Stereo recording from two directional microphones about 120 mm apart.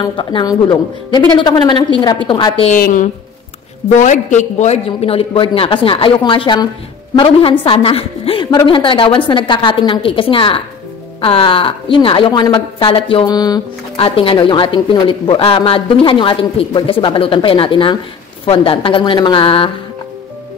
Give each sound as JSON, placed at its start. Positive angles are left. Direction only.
{"t": 0.0, "sound": "a woman's voice", "side_deg": 35}
{"t": 2.6, "sound": "a woman's voice", "side_deg": 90}
{"t": 13.3, "sound": "a woman's voice", "side_deg": 35}
{"t": 13.9, "sound": "speech", "side_deg": 50}